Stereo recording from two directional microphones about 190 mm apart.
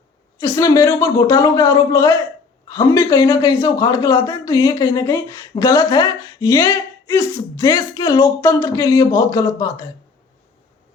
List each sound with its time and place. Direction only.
0.3 s a man's voice: 20° left (ahead or behind)